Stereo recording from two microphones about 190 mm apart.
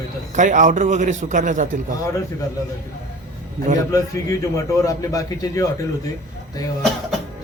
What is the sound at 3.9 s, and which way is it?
A man's voice, 15° left (ahead or behind).